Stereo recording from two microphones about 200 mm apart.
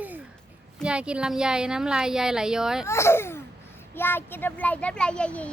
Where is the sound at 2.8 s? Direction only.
15° left (ahead or behind).